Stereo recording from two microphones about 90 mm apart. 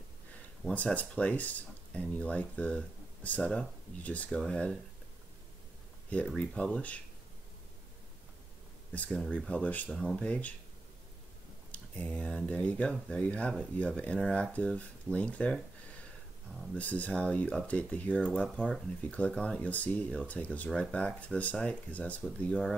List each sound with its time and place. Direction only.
0.7 s speech: 15° left (ahead or behind)
6.3 s speech: 15° left (ahead or behind)
8.9 s speech: 15° left (ahead or behind)
9.8 s speech: 5° left (ahead or behind)
11.7 s a sound: 15° left (ahead or behind)
12.3 s speech: 10° left (ahead or behind)
16.7 s speech: 15° left (ahead or behind)